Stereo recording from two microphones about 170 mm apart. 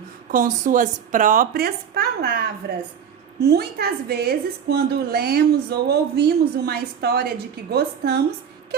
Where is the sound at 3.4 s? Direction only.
70° right (ahead or behind).